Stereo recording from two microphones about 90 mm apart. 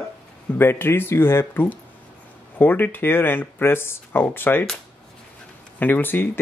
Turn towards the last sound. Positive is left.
turn(degrees=20)  # may be behind; listen again after turning